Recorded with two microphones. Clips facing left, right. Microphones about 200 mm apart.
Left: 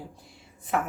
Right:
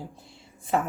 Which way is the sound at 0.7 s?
30° right (ahead or behind).